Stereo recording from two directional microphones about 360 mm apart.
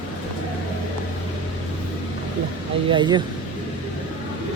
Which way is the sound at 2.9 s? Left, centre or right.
Centre.